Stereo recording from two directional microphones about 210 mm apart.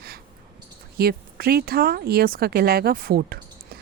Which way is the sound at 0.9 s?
45° right (ahead or behind).